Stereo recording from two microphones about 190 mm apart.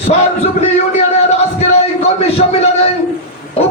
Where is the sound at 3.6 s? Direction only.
30° left (ahead or behind).